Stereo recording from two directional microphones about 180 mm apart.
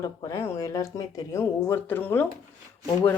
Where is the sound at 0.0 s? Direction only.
15° left (ahead or behind).